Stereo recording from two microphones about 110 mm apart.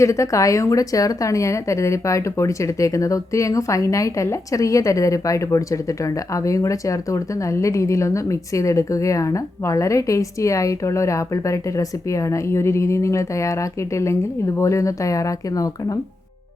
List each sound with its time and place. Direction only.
0.0 s speech: 25° left (ahead or behind)